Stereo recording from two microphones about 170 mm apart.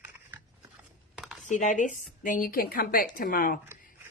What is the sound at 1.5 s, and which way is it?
A woman's voice, 45° left (ahead or behind).